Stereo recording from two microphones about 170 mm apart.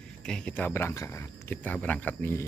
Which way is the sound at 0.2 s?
5° left (ahead or behind).